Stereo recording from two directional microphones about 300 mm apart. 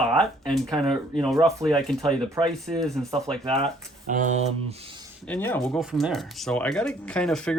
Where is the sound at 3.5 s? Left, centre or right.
Centre.